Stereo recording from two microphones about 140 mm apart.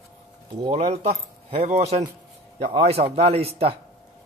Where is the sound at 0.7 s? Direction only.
55° right (ahead or behind).